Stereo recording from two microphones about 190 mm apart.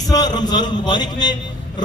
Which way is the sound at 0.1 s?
20° left (ahead or behind).